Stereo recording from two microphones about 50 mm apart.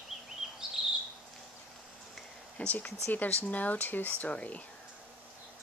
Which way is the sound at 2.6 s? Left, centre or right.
Left.